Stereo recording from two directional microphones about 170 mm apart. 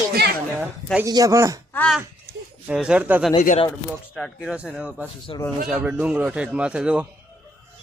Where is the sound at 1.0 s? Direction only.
20° right (ahead or behind).